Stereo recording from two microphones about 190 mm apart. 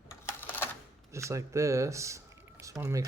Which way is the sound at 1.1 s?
15° right (ahead or behind).